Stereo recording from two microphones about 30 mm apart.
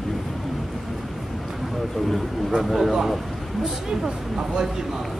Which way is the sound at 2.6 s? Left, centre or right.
Centre.